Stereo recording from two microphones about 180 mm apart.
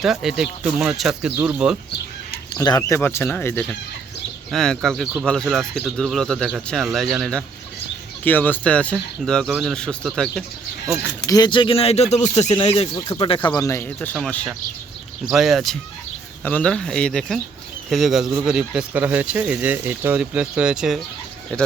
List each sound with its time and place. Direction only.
0.0 s speech: centre (ahead or behind)
2.6 s speech: 20° left (ahead or behind); by 10.4 s centre (ahead or behind)
11.3 s speech: 25° left (ahead or behind); by 21.0 s 5° right (ahead or behind)